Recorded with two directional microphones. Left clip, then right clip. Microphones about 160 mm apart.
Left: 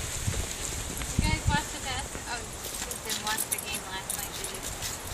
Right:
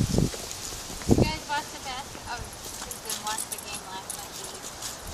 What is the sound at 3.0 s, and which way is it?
Keys jangling, centre (ahead or behind).